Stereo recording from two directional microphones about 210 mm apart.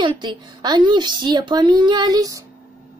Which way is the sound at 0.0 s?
20° right (ahead or behind).